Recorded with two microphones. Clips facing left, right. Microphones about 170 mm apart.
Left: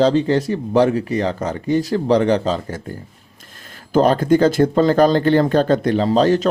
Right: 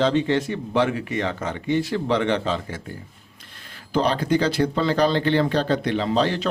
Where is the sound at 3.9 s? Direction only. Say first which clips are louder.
Left 7 dB; 45° left (ahead or behind).